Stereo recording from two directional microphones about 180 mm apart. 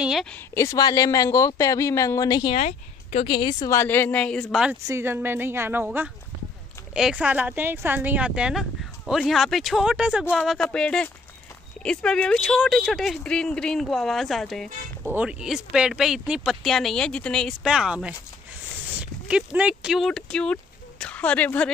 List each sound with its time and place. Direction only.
0.0 s a sound: centre (ahead or behind)
0.6 s speech: 20° left (ahead or behind); by 4.7 s 5° right (ahead or behind)
4.8 s speech: 15° right (ahead or behind); by 21.7 s 10° left (ahead or behind)